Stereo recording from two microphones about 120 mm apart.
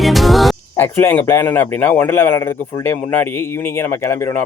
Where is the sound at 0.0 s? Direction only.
Centre (ahead or behind).